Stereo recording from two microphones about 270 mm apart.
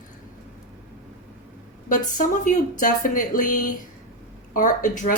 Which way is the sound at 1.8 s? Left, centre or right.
Left.